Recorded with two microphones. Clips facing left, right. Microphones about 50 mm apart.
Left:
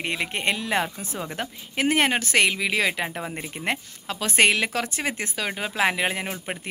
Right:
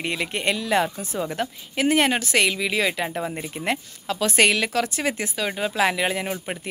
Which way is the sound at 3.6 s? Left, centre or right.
Left.